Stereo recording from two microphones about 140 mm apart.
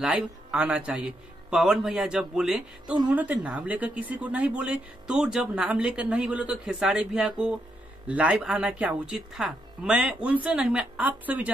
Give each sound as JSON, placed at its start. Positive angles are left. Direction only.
{"t": 0.0, "sound": "speech", "side_deg": -10}